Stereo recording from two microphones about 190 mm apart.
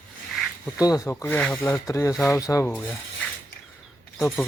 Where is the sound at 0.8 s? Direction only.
20° left (ahead or behind).